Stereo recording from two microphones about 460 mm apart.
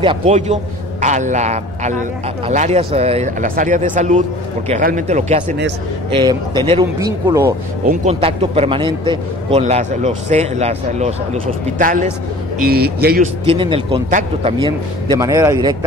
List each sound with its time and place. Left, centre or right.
0.0 s a man's voice: centre